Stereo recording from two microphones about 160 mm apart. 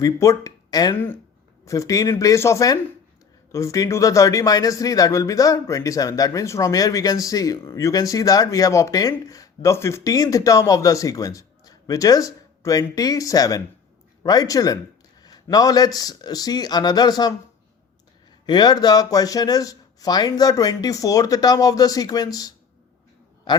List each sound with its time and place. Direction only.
0.0 s speech: 20° left (ahead or behind)
0.9 s speech: 10° left (ahead or behind)
18.4 s a man's voice: 25° left (ahead or behind)